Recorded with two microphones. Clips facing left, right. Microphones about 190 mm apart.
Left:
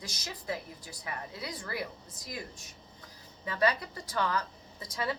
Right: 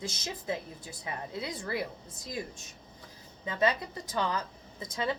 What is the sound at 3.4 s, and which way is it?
A woman's voice, 20° right (ahead or behind).